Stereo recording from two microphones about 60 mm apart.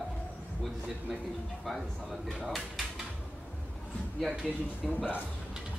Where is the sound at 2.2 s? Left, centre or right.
Centre.